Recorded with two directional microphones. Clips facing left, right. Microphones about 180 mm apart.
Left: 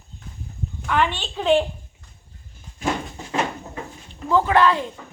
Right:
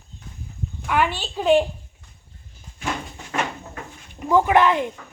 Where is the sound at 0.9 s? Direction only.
10° right (ahead or behind).